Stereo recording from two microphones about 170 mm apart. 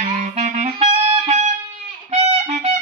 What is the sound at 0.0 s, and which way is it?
Music, 45° right (ahead or behind).